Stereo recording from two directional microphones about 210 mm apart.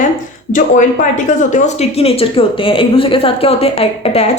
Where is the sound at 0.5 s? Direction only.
35° left (ahead or behind).